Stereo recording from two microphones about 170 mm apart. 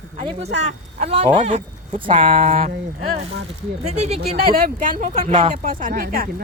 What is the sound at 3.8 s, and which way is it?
Speech, 40° right (ahead or behind).